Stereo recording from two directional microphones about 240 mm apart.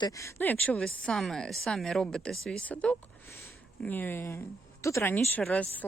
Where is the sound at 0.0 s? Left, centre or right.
Centre.